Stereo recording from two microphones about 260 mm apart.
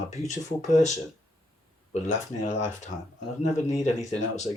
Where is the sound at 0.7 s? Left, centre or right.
Left.